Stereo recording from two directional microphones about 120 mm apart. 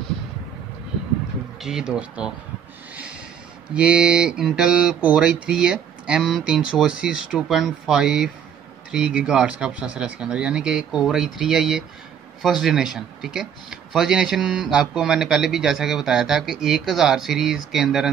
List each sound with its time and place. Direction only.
1.6 s speech: 5° right (ahead or behind)
3.7 s speech: 10° right (ahead or behind)